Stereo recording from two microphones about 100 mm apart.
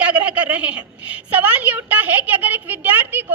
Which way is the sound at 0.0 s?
15° right (ahead or behind).